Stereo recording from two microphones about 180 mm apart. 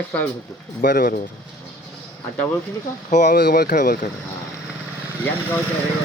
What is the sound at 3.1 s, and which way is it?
Speech, 45° left (ahead or behind).